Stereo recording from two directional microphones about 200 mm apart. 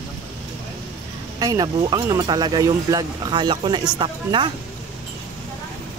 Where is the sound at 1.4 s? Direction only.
20° right (ahead or behind).